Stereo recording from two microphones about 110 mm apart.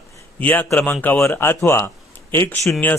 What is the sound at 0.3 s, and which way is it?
A man's voice, 15° left (ahead or behind).